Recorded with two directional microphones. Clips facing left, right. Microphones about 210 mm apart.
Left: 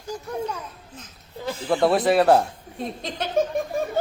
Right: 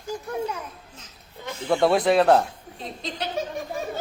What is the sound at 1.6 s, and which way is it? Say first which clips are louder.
Speech: even; centre (ahead or behind).